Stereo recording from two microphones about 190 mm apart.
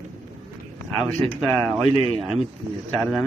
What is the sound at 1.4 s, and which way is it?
Speech, 10° left (ahead or behind).